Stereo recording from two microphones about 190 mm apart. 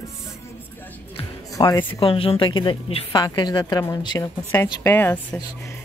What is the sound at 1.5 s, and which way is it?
A woman's voice, 20° left (ahead or behind).